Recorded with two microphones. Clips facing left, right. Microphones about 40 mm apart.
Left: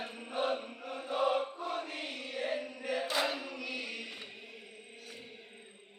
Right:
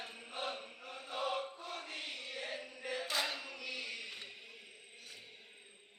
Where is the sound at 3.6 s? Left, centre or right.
Centre.